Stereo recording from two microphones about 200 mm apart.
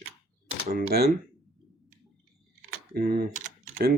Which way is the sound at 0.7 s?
45° right (ahead or behind).